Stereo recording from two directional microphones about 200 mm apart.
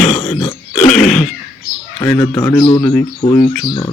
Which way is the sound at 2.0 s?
10° left (ahead or behind).